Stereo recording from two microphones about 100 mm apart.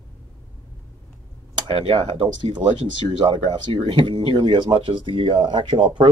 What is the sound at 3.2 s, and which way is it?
Speech, 70° right (ahead or behind).